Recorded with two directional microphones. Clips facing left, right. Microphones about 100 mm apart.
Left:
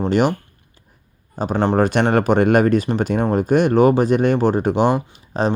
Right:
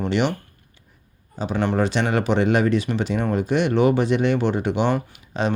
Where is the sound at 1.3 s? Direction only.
45° left (ahead or behind).